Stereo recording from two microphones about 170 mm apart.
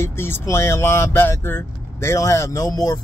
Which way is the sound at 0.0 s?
15° left (ahead or behind).